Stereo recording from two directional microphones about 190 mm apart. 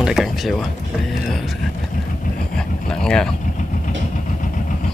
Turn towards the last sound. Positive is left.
turn(degrees=5)  # may be behind; listen again after turning